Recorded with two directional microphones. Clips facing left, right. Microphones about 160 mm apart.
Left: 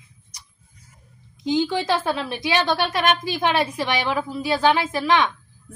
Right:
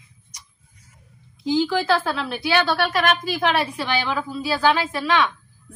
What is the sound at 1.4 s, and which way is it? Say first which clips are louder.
A woman's voice: right 1 dB; 20° left (ahead or behind).